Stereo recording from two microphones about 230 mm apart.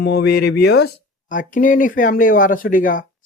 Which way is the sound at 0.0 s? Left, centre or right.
Left.